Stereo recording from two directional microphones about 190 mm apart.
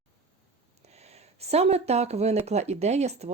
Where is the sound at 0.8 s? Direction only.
35° right (ahead or behind).